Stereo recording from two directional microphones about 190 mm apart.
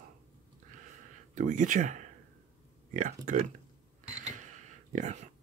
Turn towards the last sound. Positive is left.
turn(degrees=-35)  # may be behind; listen again after turning